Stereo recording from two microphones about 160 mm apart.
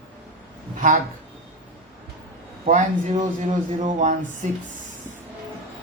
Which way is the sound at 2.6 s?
45° right (ahead or behind).